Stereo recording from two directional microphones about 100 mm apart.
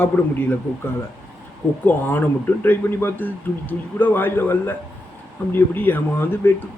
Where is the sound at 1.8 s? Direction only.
20° left (ahead or behind).